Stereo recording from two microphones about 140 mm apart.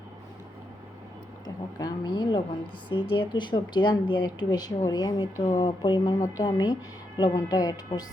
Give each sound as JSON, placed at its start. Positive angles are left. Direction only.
{"t": 1.8, "sound": "a woman's voice", "side_deg": 30}